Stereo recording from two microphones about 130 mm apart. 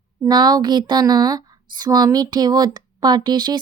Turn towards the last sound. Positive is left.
turn(degrees=-35)  # may be behind; listen again after turning